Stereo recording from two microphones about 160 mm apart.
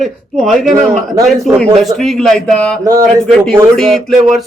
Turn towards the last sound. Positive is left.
turn(degrees=0)  # may be behind; listen again after turning